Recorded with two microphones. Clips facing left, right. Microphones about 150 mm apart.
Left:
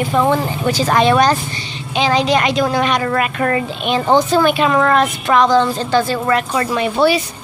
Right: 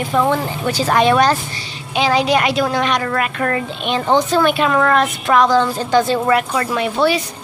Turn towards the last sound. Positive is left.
turn(degrees=5)  # may be behind; listen again after turning